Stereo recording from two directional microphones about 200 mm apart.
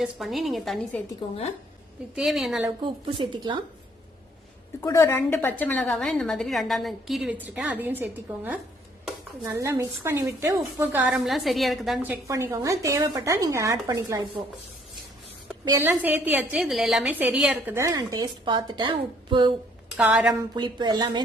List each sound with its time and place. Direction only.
0.0 s a woman's voice: centre (ahead or behind)
2.1 s a woman's voice: centre (ahead or behind)
2.8 s a woman's voice: 25° right (ahead or behind)
4.8 s a woman's voice: 15° left (ahead or behind); by 12.1 s 5° right (ahead or behind)
12.3 s a woman's voice: 15° right (ahead or behind)
15.8 s a woman's voice: 10° right (ahead or behind)
20.0 s a woman's voice: 5° right (ahead or behind)
20.6 s a woman's voice: 20° right (ahead or behind)